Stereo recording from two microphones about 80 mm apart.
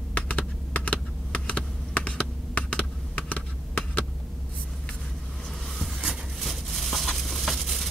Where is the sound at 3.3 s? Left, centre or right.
Centre.